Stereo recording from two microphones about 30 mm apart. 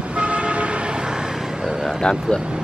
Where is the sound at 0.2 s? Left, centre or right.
Right.